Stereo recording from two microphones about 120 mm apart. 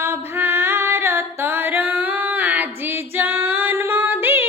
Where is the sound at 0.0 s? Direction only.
20° right (ahead or behind).